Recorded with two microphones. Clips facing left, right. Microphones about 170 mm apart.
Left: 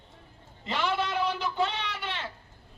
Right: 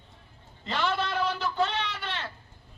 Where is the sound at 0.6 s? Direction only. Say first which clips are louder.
Even; 10° left (ahead or behind).